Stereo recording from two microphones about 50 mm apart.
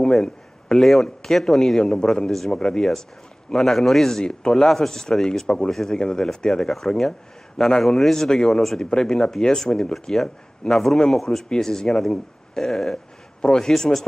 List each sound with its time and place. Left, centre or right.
0.2 s a sound: centre
1.0 s speech: centre
3.5 s speech: centre